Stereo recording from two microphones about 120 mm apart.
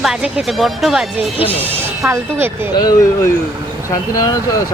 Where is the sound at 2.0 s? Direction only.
25° right (ahead or behind).